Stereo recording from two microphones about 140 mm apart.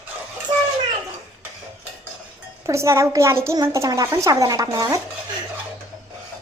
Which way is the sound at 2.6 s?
20° right (ahead or behind).